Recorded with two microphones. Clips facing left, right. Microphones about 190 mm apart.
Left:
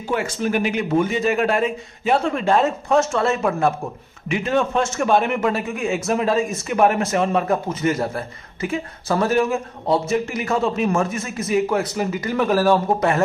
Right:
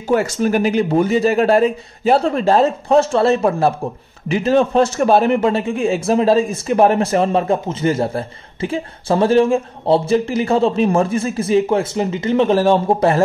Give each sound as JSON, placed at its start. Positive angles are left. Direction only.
{"t": 0.1, "sound": "a man's voice", "side_deg": -40}